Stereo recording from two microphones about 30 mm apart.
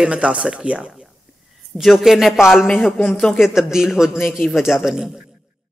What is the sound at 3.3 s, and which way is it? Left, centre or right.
A man's voice, centre.